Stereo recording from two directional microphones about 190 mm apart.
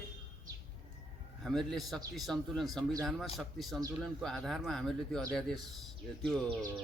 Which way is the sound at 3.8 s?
20° right (ahead or behind).